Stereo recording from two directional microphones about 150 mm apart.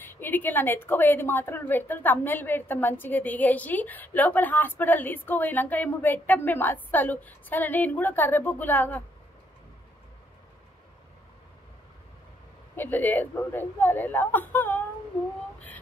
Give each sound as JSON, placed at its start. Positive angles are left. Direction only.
{"t": 0.0, "sound": "a woman's voice", "side_deg": 15}
{"t": 12.7, "sound": "a woman's voice", "side_deg": 15}